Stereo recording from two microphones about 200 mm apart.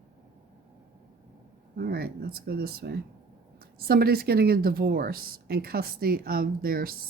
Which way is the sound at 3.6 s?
50° right (ahead or behind).